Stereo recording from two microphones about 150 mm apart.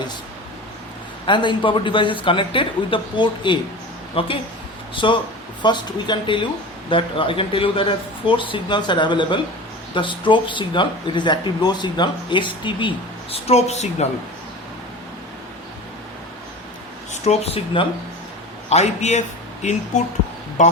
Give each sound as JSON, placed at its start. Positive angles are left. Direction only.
{"t": 1.3, "sound": "speech", "side_deg": 30}
{"t": 13.3, "sound": "speech", "side_deg": 45}
{"t": 17.1, "sound": "speech", "side_deg": 45}